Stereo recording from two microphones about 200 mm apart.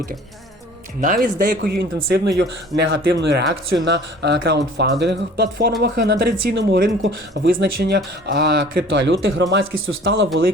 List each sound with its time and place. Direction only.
1.0 s speech: 45° right (ahead or behind)
2.4 s speech: 60° right (ahead or behind)